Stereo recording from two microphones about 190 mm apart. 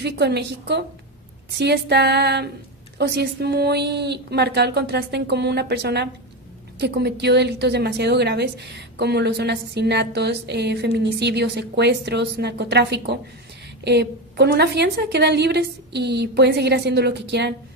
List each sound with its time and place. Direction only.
0.0 s a woman's voice: 60° right (ahead or behind)